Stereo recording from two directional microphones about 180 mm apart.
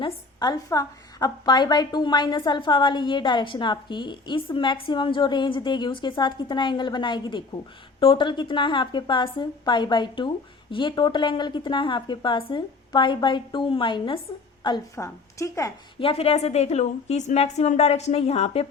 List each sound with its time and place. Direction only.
0.0 s a woman's voice: 25° left (ahead or behind)
16.0 s a woman's voice: 30° left (ahead or behind)